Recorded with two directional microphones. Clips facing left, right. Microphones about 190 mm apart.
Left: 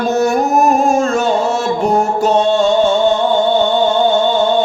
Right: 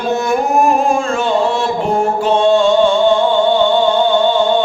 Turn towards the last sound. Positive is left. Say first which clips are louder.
# even
turn(degrees=45)  # may be behind; listen again after turning